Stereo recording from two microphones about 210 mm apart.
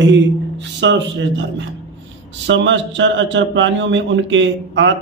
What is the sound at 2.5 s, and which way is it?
A man's voice, 60° right (ahead or behind).